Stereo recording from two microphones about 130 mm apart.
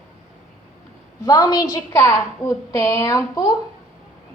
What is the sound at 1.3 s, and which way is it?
A woman's voice, 30° left (ahead or behind).